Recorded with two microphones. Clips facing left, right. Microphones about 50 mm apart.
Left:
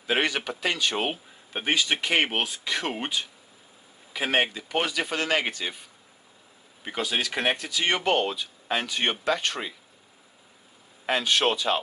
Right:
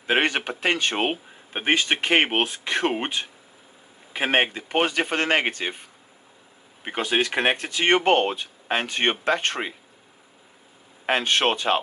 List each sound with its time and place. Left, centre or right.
0.0 s speech: right
11.1 s speech: right